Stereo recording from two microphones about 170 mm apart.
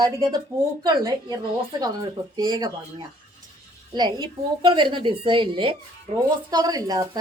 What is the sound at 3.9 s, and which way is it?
A woman's voice, 25° right (ahead or behind).